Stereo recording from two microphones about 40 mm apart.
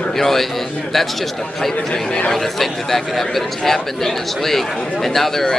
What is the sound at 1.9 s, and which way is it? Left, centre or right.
Speech, left.